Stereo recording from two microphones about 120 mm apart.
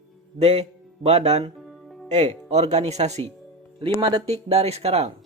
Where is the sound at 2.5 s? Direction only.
65° right (ahead or behind).